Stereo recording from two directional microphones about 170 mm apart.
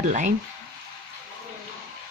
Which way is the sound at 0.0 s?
45° right (ahead or behind).